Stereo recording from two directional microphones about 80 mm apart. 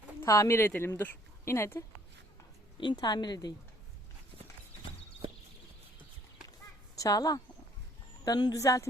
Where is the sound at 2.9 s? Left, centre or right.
Left.